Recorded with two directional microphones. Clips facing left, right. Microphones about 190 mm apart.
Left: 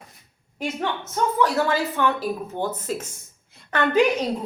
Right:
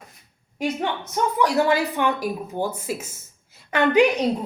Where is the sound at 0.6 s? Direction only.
15° right (ahead or behind).